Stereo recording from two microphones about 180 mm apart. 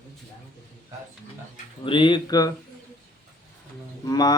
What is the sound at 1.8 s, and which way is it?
Speech, 30° left (ahead or behind).